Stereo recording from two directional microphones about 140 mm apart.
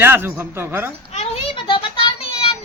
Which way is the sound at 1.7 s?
35° left (ahead or behind).